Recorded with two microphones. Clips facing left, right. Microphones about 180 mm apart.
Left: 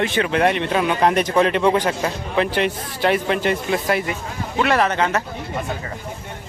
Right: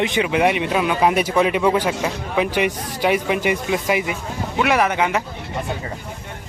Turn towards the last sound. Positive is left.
turn(degrees=-10)  # may be behind; listen again after turning